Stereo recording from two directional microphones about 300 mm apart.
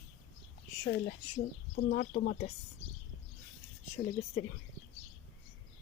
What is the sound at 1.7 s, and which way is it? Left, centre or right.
Speech, left.